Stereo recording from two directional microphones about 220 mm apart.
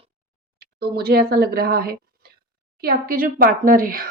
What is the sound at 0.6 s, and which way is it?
A woman's voice, 45° right (ahead or behind).